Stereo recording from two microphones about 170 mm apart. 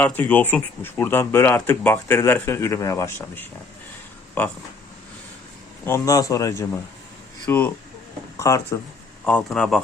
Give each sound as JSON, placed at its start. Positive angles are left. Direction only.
{"t": 0.0, "sound": "speech", "side_deg": 10}
{"t": 5.8, "sound": "a man's voice", "side_deg": 20}
{"t": 8.4, "sound": "speech", "side_deg": 20}
{"t": 9.2, "sound": "speech", "side_deg": 5}